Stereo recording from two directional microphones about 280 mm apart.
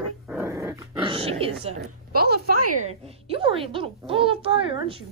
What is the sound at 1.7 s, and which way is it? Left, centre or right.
Speech, right.